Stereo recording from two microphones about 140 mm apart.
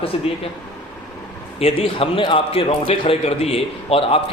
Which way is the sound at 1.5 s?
45° left (ahead or behind).